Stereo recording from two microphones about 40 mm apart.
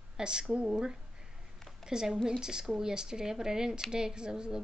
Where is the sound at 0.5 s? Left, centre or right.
Right.